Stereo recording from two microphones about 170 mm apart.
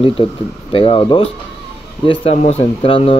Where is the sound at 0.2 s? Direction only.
30° left (ahead or behind).